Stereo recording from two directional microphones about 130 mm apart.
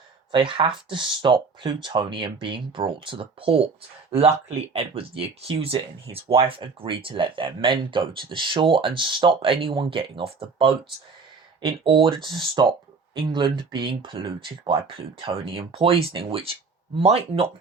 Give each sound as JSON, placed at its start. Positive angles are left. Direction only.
{"t": 0.3, "sound": "speech", "side_deg": -40}